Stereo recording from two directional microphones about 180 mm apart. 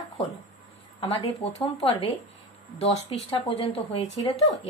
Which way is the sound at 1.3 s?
35° left (ahead or behind).